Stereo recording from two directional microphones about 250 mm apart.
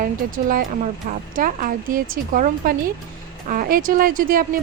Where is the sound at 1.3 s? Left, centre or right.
Right.